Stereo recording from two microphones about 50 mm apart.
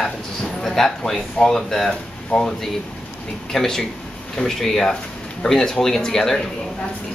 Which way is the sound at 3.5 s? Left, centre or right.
Centre.